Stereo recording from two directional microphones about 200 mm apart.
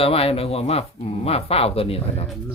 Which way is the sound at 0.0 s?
30° left (ahead or behind).